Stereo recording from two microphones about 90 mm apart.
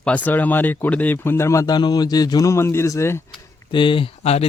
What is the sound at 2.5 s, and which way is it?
Speech, 30° left (ahead or behind).